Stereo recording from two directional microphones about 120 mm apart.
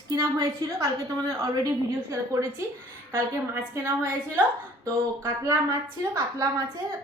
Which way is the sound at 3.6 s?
20° right (ahead or behind).